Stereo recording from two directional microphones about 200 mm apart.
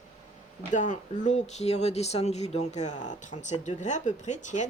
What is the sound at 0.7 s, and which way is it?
Speech, 40° left (ahead or behind).